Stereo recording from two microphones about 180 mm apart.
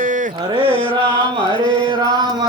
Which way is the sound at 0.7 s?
30° left (ahead or behind).